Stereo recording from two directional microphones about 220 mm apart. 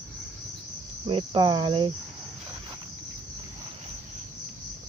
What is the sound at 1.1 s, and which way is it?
Speech, 20° right (ahead or behind).